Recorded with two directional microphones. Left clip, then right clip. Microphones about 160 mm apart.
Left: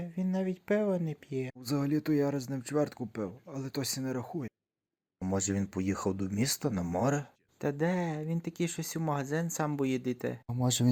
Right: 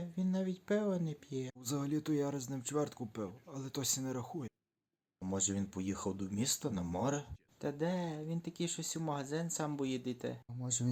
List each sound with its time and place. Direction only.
0.0 s speech: 25° left (ahead or behind); by 10.3 s 40° left (ahead or behind)
10.6 s speech: 65° left (ahead or behind)